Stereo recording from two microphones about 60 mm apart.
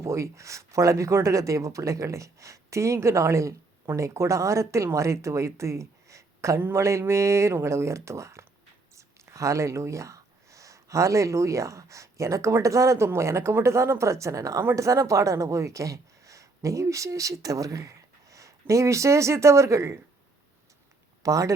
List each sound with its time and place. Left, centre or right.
0.0 s speech: right
21.2 s speech: right